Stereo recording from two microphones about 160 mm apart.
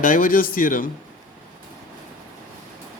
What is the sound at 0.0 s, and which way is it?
Speech, 60° left (ahead or behind).